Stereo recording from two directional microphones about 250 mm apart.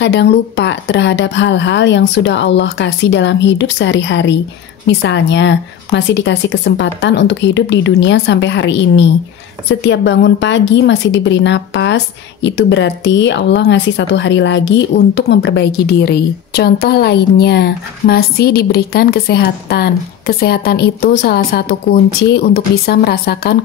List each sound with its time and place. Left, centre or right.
0.0 s a woman's voice: left